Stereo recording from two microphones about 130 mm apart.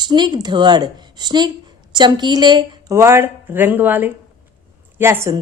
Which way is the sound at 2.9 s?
20° right (ahead or behind).